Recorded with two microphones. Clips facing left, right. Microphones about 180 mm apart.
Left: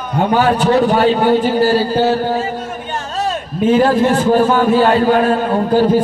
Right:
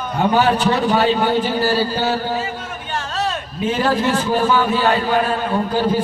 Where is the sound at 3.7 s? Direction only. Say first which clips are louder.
Left 5 dB; 50° left (ahead or behind).